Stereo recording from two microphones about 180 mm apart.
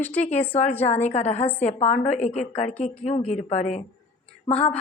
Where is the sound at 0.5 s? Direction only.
40° left (ahead or behind).